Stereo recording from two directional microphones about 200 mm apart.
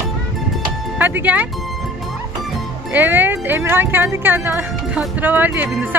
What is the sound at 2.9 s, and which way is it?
Speech, 10° right (ahead or behind).